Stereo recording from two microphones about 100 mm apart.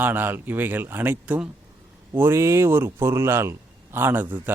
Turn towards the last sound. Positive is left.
turn(degrees=-20)  # may be behind; listen again after turning